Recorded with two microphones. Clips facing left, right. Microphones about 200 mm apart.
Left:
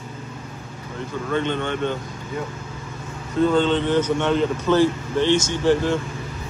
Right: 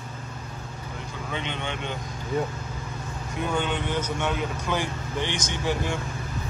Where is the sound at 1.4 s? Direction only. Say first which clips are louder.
Left 9 dB; 15° right (ahead or behind).